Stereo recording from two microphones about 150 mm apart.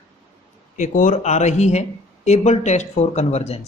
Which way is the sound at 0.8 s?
60° left (ahead or behind).